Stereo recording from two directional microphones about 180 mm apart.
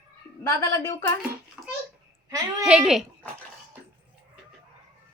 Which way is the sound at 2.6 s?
5° right (ahead or behind).